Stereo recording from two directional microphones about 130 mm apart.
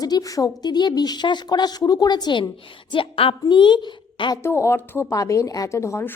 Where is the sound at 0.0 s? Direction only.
30° left (ahead or behind).